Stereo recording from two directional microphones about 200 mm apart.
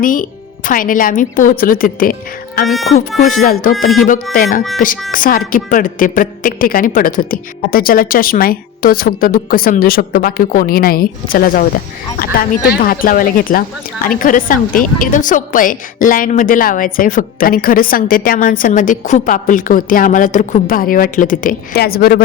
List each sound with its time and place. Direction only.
0.0 s a woman's voice: 40° left (ahead or behind)
3.2 s a woman's voice: 45° left (ahead or behind)